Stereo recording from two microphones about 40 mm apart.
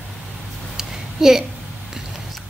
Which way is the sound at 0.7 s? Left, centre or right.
Centre.